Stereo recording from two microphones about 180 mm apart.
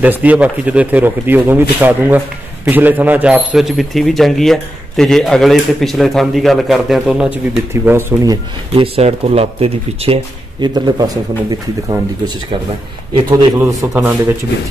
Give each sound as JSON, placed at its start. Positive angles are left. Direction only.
{"t": 0.0, "sound": "speech", "side_deg": -10}
{"t": 8.8, "sound": "a man's voice", "side_deg": -35}
{"t": 13.6, "sound": "speech", "side_deg": -15}